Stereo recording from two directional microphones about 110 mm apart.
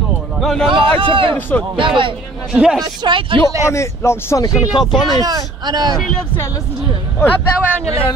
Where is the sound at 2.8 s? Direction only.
45° right (ahead or behind).